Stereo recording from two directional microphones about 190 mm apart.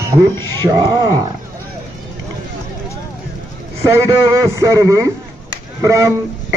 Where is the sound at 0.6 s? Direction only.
20° right (ahead or behind).